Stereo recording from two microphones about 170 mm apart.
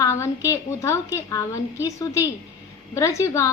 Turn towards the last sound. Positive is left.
turn(degrees=20)  # may be behind; listen again after turning